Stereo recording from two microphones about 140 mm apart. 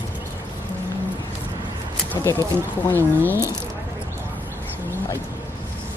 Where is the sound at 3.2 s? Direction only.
20° right (ahead or behind).